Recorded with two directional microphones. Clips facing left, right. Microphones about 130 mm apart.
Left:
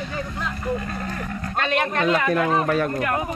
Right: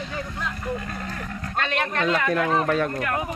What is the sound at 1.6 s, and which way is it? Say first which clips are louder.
Speech: left 3 dB; 10° left (ahead or behind).